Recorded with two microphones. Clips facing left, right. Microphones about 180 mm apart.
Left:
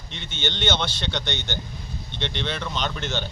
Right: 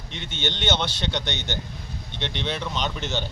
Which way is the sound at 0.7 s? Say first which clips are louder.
Right 1 dB; 40° right (ahead or behind).